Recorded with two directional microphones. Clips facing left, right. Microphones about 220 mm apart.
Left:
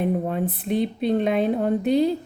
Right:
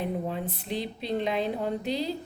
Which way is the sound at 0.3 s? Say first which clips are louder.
Left 8 dB; 55° left (ahead or behind).